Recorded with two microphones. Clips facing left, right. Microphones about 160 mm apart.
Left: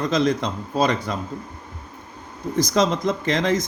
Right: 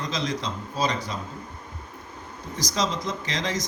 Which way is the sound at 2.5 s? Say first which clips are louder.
Left 8 dB; 55° left (ahead or behind).